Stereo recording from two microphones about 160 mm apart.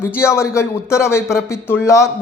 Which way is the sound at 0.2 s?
20° left (ahead or behind).